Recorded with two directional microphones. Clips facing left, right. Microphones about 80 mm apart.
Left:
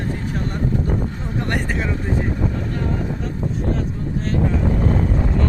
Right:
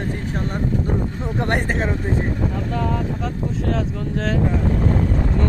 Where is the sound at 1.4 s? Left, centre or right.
Right.